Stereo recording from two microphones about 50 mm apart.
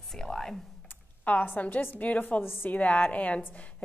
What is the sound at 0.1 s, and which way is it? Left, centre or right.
Computer keyboard, centre.